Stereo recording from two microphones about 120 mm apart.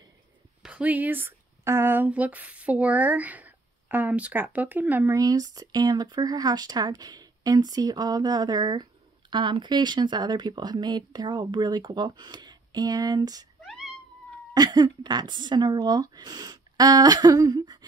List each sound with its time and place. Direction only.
0.6 s speech: 10° right (ahead or behind)
5.1 s speech: 30° right (ahead or behind)
13.7 s cat: 5° right (ahead or behind)
14.5 s speech: 35° right (ahead or behind)